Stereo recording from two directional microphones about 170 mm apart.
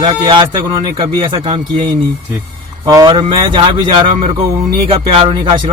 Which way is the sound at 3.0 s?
30° right (ahead or behind).